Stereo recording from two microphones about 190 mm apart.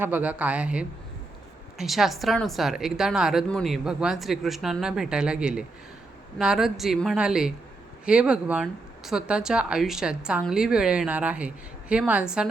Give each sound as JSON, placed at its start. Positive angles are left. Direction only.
{"t": 0.0, "sound": "speech", "side_deg": -10}